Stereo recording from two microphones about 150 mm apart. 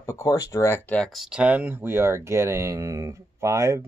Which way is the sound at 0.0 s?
20° left (ahead or behind).